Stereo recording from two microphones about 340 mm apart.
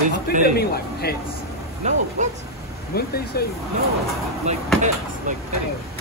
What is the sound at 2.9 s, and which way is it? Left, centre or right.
Speech, left.